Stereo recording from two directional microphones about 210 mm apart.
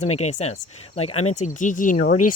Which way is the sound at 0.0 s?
30° left (ahead or behind).